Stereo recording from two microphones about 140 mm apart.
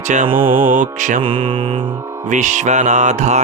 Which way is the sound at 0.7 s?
70° right (ahead or behind).